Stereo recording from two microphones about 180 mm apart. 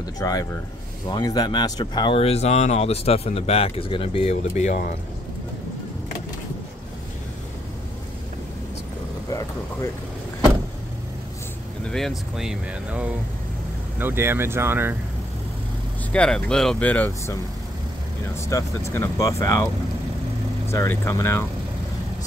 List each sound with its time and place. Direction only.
0.0 s speech: 20° left (ahead or behind); by 4.8 s 40° left (ahead or behind)
9.3 s speech: 20° left (ahead or behind)
11.8 s speech: centre (ahead or behind)
16.1 s speech: 5° left (ahead or behind)
20.7 s speech: 15° left (ahead or behind)